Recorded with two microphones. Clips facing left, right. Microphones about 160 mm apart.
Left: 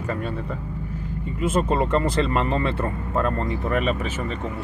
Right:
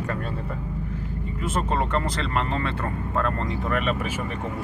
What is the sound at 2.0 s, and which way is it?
Speech, 15° left (ahead or behind).